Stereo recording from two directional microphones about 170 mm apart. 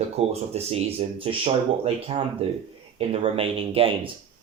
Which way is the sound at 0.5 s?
35° right (ahead or behind).